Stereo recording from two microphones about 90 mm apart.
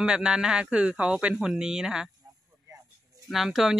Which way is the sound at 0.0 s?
10° right (ahead or behind).